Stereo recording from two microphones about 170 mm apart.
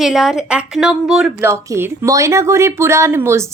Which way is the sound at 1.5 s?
15° right (ahead or behind).